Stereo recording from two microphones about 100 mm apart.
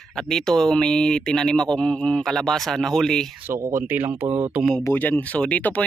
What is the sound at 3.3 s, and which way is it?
Speech, 25° right (ahead or behind).